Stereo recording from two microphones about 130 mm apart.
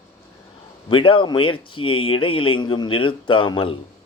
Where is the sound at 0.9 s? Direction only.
40° left (ahead or behind).